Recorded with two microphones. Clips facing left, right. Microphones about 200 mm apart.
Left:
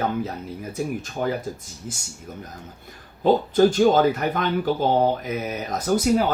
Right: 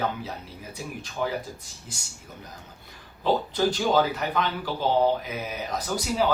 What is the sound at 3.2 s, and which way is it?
Speech, 50° left (ahead or behind).